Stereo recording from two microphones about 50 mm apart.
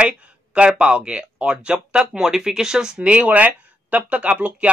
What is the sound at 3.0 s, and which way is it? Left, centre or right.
Speech, right.